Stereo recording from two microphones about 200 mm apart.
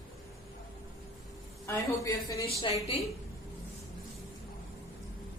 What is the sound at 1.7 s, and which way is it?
Speech, 15° left (ahead or behind).